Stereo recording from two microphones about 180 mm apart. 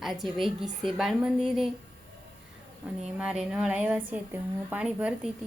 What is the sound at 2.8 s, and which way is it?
A woman's voice, 5° right (ahead or behind).